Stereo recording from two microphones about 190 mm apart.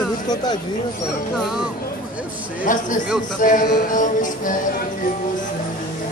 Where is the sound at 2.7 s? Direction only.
45° left (ahead or behind).